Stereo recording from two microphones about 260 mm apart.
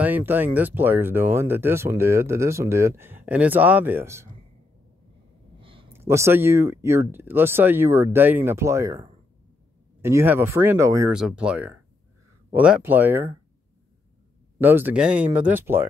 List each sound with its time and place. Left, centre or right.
0.0 s speech: centre
5.6 s a sound: centre
5.9 s speech: centre
14.6 s speech: centre